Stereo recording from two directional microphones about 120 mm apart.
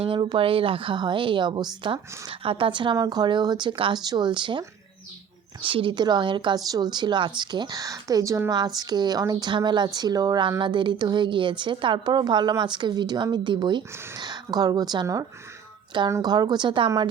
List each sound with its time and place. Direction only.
0.0 s speech: 40° right (ahead or behind)
5.6 s speech: 45° right (ahead or behind)